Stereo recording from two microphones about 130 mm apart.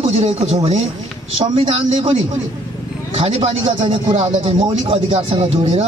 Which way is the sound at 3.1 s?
50° right (ahead or behind).